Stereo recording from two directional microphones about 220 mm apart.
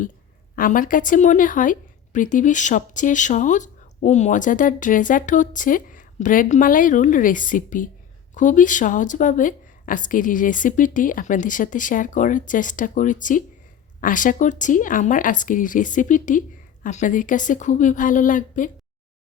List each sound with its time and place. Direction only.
0.5 s a woman's voice: 40° left (ahead or behind)